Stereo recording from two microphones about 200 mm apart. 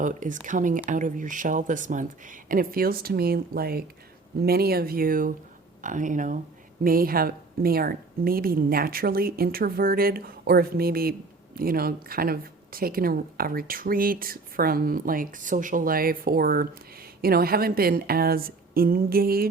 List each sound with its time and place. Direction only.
0.0 s speech: 40° right (ahead or behind)